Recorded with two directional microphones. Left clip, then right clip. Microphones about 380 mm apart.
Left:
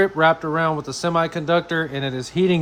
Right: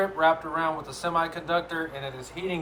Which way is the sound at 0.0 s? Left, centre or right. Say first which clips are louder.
Left 6 dB; left.